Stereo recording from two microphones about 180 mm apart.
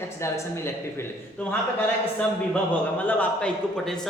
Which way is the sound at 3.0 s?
10° left (ahead or behind).